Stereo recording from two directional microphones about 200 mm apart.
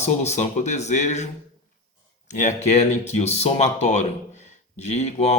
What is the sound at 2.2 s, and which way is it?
Speech, 35° left (ahead or behind).